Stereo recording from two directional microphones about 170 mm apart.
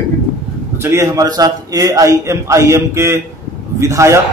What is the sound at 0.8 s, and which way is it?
A man's voice, 15° right (ahead or behind).